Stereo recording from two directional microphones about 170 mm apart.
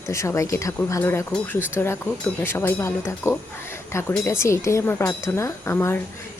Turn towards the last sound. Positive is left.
turn(degrees=15)  # may be behind; listen again after turning